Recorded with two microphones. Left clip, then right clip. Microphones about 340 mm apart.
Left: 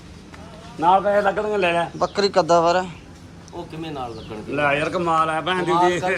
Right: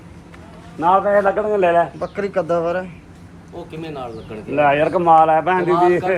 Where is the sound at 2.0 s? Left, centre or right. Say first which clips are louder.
Left 3 dB; centre.